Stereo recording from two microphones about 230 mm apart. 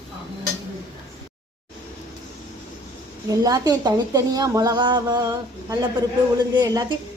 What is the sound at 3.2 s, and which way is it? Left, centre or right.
A woman's voice, centre.